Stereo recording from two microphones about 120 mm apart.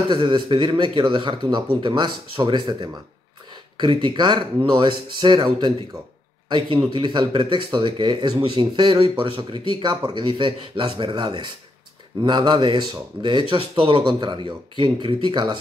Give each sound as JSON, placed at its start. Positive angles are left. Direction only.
{"t": 0.1, "sound": "speech", "side_deg": -40}
{"t": 6.9, "sound": "speech", "side_deg": -40}
{"t": 9.0, "sound": "speech", "side_deg": -50}